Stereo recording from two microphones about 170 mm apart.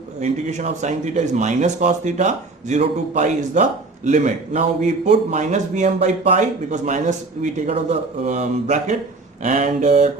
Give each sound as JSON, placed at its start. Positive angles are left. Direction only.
{"t": 0.2, "sound": "speech", "side_deg": -45}
{"t": 9.4, "sound": "mantra", "side_deg": -40}